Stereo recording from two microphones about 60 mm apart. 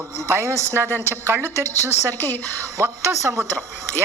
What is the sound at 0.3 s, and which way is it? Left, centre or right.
A woman's voice, right.